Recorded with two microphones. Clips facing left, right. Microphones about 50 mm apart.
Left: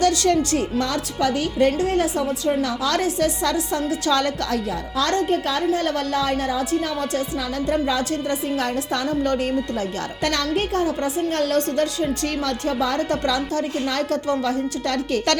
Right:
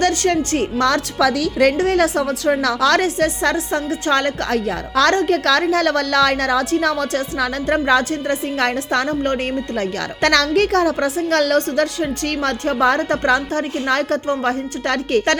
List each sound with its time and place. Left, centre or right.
0.0 s a woman's voice: right
1.7 s a woman's voice: right
4.9 s a woman's voice: right
11.5 s a woman's voice: right